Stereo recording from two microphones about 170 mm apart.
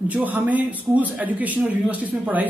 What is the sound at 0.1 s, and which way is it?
Speech, 10° right (ahead or behind).